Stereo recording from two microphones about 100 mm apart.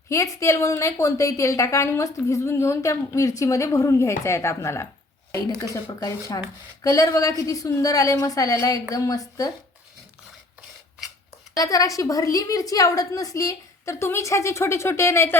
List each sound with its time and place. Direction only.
0.1 s a woman's voice: 30° left (ahead or behind)
11.5 s a woman's voice: 35° left (ahead or behind)